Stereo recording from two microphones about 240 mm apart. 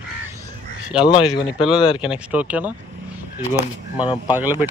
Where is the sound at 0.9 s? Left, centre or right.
Centre.